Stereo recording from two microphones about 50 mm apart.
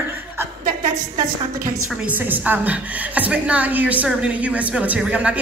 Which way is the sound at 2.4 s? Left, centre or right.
Right.